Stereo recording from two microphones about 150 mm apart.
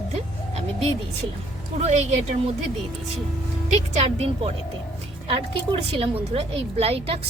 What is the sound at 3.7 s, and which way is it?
A woman's voice, 45° right (ahead or behind).